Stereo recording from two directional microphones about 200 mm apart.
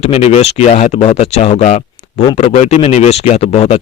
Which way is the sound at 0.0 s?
35° left (ahead or behind).